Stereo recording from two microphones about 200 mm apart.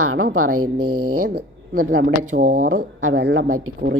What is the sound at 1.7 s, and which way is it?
Speech, 45° right (ahead or behind).